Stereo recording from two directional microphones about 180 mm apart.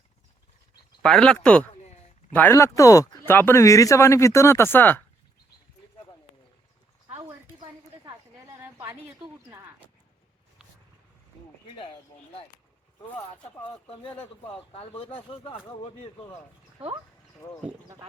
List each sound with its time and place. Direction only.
1.0 s speech: 5° left (ahead or behind)
1.7 s a sound: 35° left (ahead or behind)
2.3 s speech: 10° left (ahead or behind)
7.6 s a sound: 25° right (ahead or behind)
14.1 s speech: 10° left (ahead or behind)
14.5 s speech: 30° left (ahead or behind)